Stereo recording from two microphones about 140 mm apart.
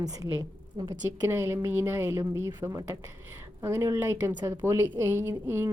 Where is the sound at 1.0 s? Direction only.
20° right (ahead or behind).